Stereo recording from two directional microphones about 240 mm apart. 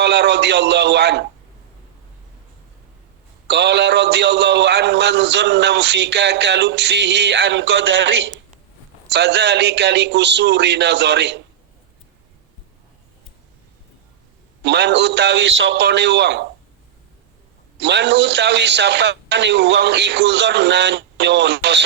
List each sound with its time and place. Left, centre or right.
0.0 s a man's voice: right
3.4 s a man's voice: right
14.6 s a man's voice: right
17.7 s a man's voice: right